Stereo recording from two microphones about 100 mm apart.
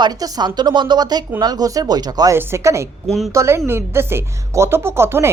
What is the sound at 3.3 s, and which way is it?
A woman's voice, 30° right (ahead or behind).